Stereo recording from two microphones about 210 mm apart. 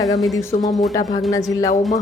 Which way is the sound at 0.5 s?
30° left (ahead or behind).